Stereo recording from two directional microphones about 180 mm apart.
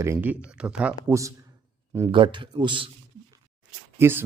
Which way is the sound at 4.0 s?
10° right (ahead or behind).